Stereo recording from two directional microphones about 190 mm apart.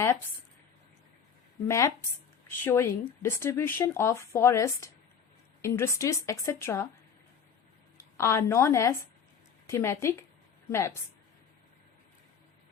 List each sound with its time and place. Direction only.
1.6 s speech: 15° left (ahead or behind)
7.9 s speech: 15° left (ahead or behind)